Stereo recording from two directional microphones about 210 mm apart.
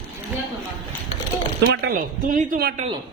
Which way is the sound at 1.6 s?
55° right (ahead or behind).